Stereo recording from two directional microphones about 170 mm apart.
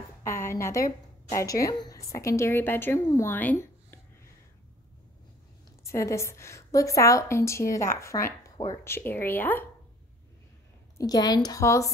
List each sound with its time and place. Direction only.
0.2 s a sound: 15° left (ahead or behind)
1.3 s a woman's voice: 20° left (ahead or behind)
5.9 s a woman's voice: 15° left (ahead or behind)
11.0 s a woman's voice: 20° left (ahead or behind)